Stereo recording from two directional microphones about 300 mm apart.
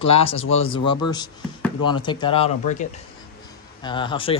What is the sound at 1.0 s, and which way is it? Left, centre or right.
Speech, left.